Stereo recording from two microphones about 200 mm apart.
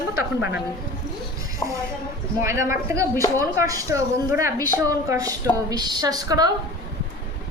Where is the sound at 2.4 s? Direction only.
15° right (ahead or behind).